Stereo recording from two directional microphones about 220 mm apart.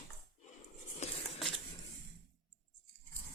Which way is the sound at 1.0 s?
30° left (ahead or behind).